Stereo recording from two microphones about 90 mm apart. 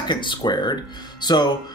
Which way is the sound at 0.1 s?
60° left (ahead or behind).